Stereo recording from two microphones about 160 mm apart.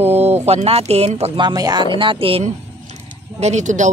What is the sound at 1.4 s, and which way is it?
A woman's voice, 25° right (ahead or behind).